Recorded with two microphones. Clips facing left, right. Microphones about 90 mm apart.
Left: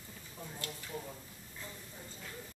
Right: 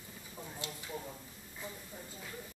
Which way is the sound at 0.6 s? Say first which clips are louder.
Even; 20° right (ahead or behind).